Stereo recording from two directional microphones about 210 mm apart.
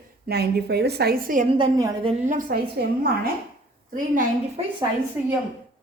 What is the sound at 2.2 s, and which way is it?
A woman's voice, 40° right (ahead or behind).